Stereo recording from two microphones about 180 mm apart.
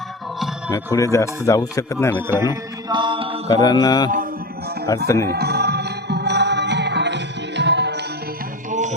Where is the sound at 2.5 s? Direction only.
25° right (ahead or behind).